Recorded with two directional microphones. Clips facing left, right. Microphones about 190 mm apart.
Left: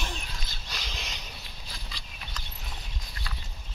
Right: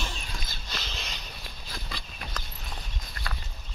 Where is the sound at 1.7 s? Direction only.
55° right (ahead or behind).